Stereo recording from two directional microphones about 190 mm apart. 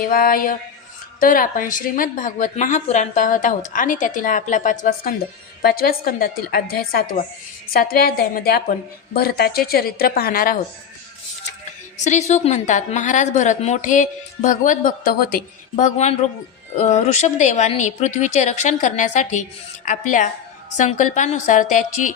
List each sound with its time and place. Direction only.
0.0 s a woman's voice: 50° left (ahead or behind)
12.0 s a woman's voice: 40° left (ahead or behind)
15.7 s a woman's voice: 35° left (ahead or behind)